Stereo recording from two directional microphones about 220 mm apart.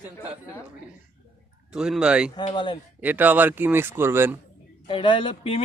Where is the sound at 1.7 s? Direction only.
5° right (ahead or behind).